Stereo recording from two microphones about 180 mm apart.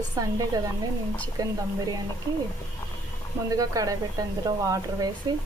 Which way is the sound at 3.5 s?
20° right (ahead or behind).